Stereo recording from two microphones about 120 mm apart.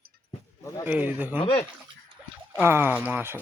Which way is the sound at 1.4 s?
45° left (ahead or behind).